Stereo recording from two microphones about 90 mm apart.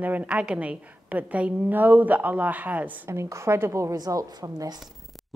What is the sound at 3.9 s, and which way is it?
Speech, 45° right (ahead or behind).